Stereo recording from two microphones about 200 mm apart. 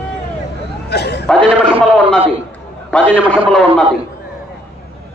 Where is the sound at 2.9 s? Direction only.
5° left (ahead or behind).